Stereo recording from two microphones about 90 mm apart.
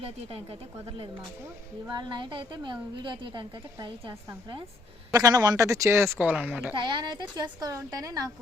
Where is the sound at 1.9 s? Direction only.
55° right (ahead or behind).